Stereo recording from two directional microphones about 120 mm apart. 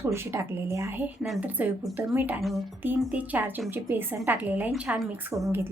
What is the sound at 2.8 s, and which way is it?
Speech, 15° right (ahead or behind).